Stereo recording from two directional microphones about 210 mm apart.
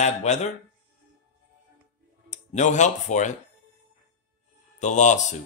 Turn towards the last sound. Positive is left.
turn(degrees=35)  # may be behind; listen again after turning